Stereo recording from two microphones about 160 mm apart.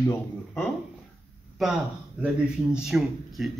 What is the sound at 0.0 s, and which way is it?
Speech, 10° left (ahead or behind).